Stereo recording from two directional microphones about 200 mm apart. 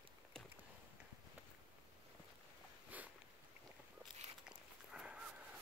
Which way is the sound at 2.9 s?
10° right (ahead or behind).